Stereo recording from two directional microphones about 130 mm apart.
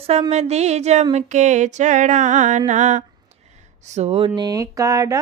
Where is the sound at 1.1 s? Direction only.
65° right (ahead or behind).